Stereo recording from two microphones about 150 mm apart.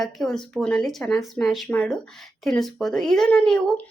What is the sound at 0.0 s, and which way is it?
A woman's voice, centre (ahead or behind).